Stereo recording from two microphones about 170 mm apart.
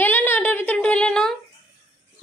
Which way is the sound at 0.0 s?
10° left (ahead or behind).